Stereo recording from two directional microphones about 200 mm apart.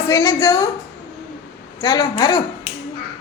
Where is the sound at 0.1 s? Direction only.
15° left (ahead or behind).